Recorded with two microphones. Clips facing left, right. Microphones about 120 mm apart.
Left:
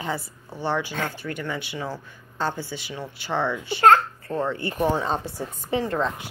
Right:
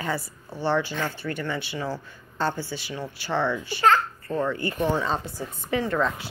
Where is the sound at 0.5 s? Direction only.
15° left (ahead or behind).